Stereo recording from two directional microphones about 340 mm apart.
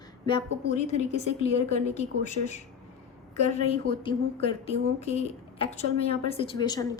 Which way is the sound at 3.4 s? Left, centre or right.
Centre.